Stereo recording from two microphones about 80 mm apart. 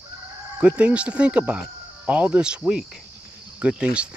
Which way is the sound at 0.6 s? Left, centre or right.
Centre.